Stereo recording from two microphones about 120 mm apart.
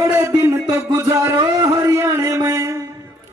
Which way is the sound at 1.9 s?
25° right (ahead or behind).